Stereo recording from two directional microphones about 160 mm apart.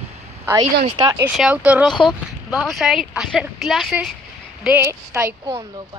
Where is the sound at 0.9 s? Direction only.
25° right (ahead or behind).